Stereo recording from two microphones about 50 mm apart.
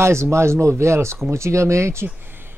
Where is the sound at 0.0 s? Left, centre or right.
Right.